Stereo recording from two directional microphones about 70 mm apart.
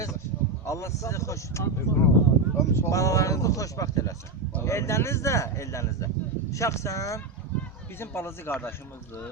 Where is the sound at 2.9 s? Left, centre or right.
Left.